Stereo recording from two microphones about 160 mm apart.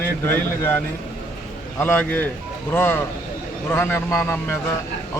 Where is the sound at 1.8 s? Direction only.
10° left (ahead or behind).